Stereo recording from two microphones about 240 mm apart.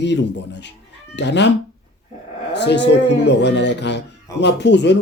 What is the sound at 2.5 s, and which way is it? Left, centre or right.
A man's voice, left.